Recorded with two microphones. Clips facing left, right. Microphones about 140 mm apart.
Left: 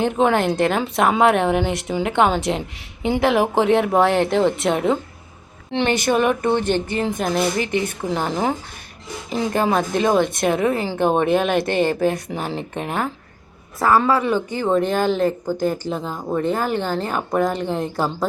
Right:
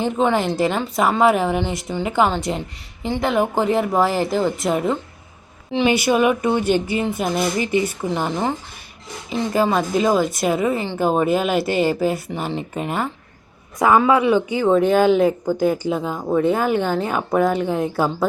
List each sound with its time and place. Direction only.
0.0 s a woman's voice: centre (ahead or behind)
13.7 s a woman's voice: 15° right (ahead or behind)